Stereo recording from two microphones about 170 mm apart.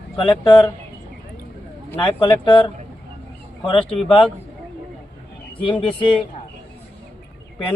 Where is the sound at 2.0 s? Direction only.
30° left (ahead or behind).